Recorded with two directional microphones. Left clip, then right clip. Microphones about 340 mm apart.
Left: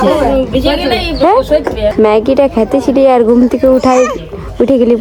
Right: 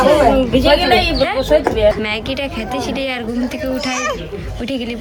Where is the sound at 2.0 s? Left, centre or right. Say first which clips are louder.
Left 13 dB; centre.